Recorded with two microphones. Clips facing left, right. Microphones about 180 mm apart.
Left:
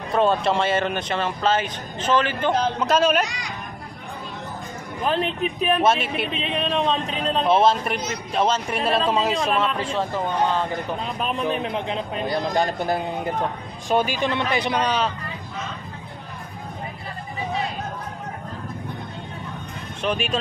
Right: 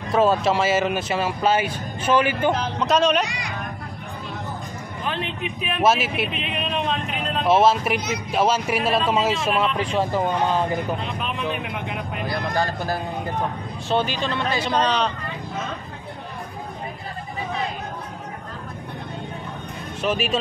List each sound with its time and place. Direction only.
0.1 s speech: 5° right (ahead or behind)
2.8 s speech: 5° left (ahead or behind)
5.0 s speech: 35° left (ahead or behind)
5.8 s speech: 5° right (ahead or behind)
6.3 s speech: 35° left (ahead or behind)
7.4 s speech: 5° right (ahead or behind)
11.1 s speech: 40° left (ahead or behind); by 15.1 s 5° left (ahead or behind)
20.0 s speech: 5° right (ahead or behind)